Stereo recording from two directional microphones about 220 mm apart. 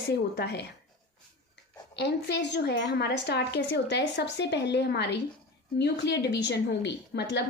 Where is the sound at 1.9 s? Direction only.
50° left (ahead or behind).